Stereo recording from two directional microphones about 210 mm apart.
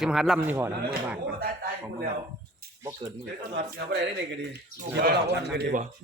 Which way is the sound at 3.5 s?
55° right (ahead or behind).